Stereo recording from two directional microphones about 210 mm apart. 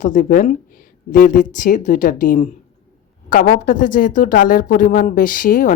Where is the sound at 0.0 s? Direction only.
40° left (ahead or behind).